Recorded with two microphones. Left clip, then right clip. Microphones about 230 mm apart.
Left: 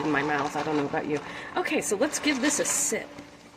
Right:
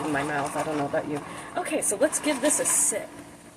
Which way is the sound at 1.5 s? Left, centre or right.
Left.